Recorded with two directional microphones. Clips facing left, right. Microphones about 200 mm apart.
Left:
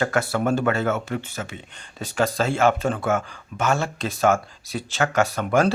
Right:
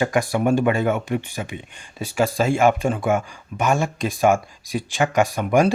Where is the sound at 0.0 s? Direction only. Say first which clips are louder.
Right 2 dB; 15° right (ahead or behind).